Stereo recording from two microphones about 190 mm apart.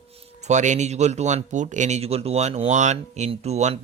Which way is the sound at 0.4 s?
40° right (ahead or behind).